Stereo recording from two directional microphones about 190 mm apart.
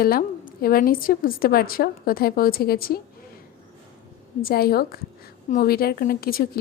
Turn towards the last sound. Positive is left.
turn(degrees=50)  # may be behind; listen again after turning